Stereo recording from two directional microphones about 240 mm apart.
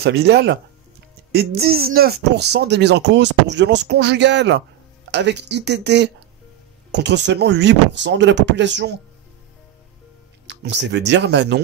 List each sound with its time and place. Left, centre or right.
0.0 s speech: right
10.4 s speech: right